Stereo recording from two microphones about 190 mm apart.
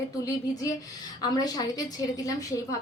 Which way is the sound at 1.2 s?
20° left (ahead or behind).